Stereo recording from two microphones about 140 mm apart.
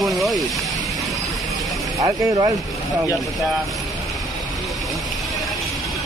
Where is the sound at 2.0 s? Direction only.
30° right (ahead or behind).